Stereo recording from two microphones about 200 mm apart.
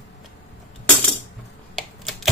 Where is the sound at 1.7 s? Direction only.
Centre (ahead or behind).